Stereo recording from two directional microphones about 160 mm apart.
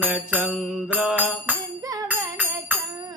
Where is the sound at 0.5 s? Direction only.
10° right (ahead or behind).